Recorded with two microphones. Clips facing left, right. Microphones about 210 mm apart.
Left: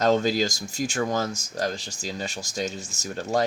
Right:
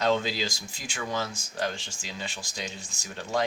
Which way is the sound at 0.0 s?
45° left (ahead or behind).